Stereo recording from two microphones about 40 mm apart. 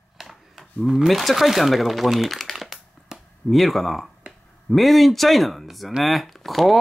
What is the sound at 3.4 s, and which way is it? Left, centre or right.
Speech, centre.